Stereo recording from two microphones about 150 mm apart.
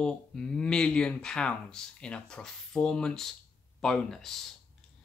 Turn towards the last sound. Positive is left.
turn(degrees=0)  # may be behind; listen again after turning